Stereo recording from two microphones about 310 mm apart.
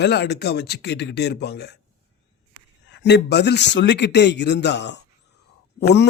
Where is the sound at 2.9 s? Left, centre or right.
Left.